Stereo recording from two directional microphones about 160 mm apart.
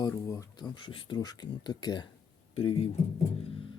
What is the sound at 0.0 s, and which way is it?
Speech, 20° left (ahead or behind).